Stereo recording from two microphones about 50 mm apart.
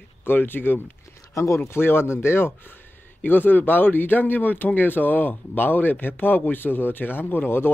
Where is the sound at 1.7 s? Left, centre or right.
Left.